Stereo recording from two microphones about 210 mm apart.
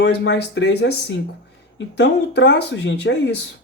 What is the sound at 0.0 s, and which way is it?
Speech, 55° left (ahead or behind).